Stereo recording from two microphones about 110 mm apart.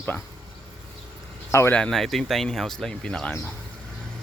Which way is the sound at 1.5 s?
25° left (ahead or behind).